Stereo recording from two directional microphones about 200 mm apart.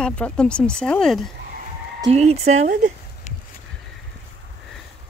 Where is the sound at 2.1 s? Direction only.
35° right (ahead or behind).